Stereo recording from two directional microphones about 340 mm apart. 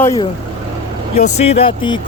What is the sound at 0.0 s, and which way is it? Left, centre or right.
Speech, centre.